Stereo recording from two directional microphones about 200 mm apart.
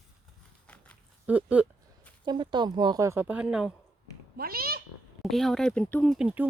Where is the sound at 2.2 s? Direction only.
20° right (ahead or behind); by 3.7 s 5° right (ahead or behind).